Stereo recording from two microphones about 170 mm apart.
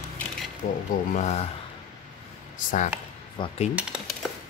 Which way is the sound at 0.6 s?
55° left (ahead or behind).